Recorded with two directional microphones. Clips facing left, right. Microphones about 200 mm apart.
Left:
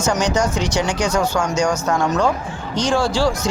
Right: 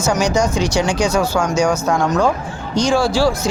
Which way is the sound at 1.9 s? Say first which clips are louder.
Right 2 dB; 5° left (ahead or behind).